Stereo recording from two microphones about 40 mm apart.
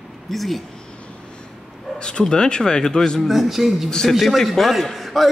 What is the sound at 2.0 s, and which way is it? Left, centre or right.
Speech, centre.